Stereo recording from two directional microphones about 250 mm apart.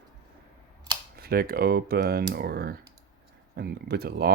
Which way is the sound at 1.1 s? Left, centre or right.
Right.